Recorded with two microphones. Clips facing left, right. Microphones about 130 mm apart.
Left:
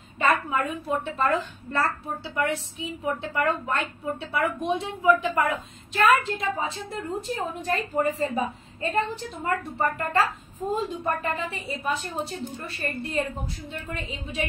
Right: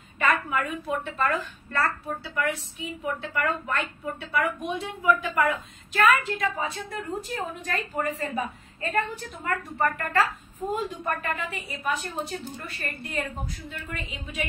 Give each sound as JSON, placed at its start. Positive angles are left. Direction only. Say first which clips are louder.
{"t": 0.2, "sound": "a woman's voice", "louder": "left 2 dB", "side_deg": 25}